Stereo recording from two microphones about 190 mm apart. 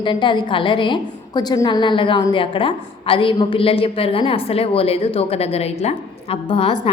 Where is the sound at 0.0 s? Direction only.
25° left (ahead or behind).